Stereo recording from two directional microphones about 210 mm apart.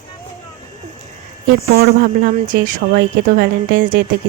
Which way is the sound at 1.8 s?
40° right (ahead or behind).